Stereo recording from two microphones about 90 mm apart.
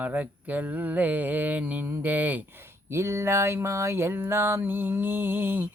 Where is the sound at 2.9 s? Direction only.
30° right (ahead or behind).